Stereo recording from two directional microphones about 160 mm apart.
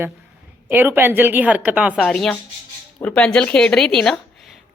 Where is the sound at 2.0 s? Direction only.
5° left (ahead or behind).